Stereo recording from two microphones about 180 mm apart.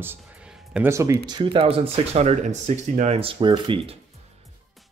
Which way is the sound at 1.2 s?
25° right (ahead or behind).